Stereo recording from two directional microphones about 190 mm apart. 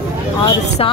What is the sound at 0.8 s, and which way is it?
Speech, 30° left (ahead or behind).